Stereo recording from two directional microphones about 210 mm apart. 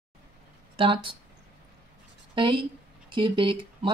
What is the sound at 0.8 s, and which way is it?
Speech, 25° right (ahead or behind).